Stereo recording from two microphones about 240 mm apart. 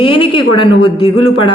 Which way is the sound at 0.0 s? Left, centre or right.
Left.